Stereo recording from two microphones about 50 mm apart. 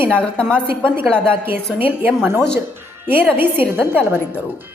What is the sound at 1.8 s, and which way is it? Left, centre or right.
A woman's voice, right.